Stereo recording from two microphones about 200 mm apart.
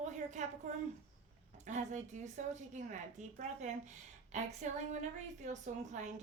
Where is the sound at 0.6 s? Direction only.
35° right (ahead or behind).